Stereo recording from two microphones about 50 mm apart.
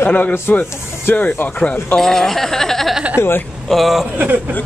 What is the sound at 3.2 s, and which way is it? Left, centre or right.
Speech, left.